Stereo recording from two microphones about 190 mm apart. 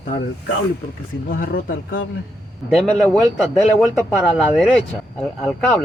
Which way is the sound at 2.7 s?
5° left (ahead or behind).